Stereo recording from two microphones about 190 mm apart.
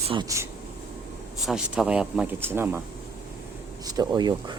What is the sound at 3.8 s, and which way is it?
Speech, 20° right (ahead or behind).